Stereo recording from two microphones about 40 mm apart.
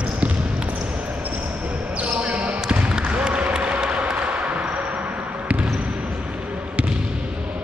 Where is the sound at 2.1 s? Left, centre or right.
Right.